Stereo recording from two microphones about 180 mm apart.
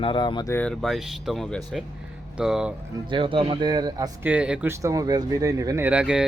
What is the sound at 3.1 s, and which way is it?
Speech, 30° right (ahead or behind).